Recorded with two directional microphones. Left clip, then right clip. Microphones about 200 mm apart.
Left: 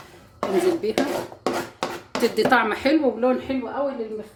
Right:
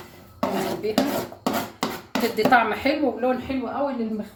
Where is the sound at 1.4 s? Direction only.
30° left (ahead or behind).